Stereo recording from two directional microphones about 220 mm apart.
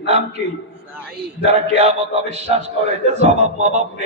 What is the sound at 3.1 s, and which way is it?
Speech, 30° right (ahead or behind).